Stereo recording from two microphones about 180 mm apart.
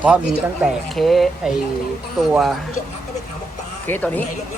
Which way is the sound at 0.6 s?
Centre (ahead or behind).